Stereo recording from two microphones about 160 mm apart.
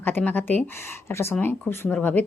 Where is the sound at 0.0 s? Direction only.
10° left (ahead or behind).